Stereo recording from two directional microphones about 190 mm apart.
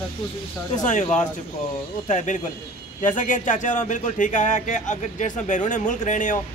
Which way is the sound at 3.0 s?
40° left (ahead or behind).